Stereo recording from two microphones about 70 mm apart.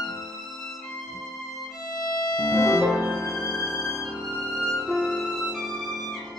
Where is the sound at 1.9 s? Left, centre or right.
Left.